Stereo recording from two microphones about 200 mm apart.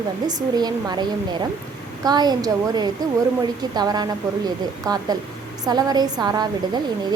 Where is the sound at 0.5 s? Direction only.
20° right (ahead or behind).